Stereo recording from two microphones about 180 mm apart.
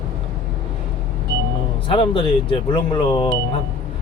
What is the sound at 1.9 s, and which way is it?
Speech, 30° left (ahead or behind).